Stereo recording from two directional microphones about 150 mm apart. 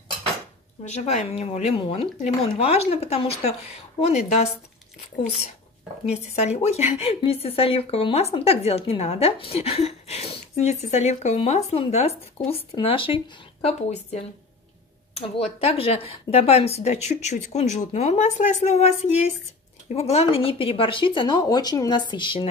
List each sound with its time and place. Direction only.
0.8 s speech: 50° left (ahead or behind)
6.0 s speech: 45° left (ahead or behind)